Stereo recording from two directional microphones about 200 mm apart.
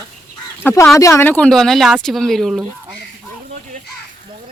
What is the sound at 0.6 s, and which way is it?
Speech, 10° left (ahead or behind).